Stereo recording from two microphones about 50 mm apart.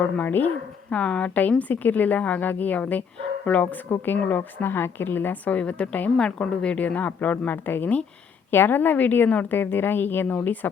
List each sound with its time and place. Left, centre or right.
0.2 s a woman's voice: left
0.9 s a woman's voice: left